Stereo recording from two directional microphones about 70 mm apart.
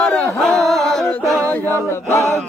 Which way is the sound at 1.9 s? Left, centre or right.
Left.